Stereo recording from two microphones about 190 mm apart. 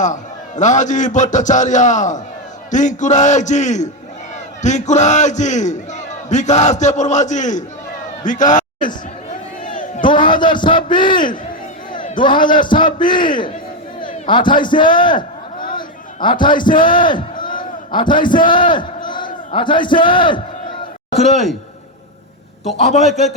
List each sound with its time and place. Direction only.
0.0 s a man's voice: 40° left (ahead or behind)
9.6 s crowd: 40° left (ahead or behind)
10.1 s a man's voice: 25° left (ahead or behind)
16.2 s a man's voice: 25° left (ahead or behind)
21.1 s a man's voice: 35° left (ahead or behind)
22.8 s a man's voice: 35° left (ahead or behind)